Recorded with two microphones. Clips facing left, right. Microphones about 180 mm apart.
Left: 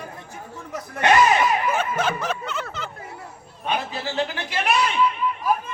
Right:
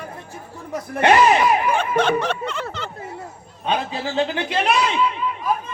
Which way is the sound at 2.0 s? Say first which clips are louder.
Right 5 dB; 5° left (ahead or behind).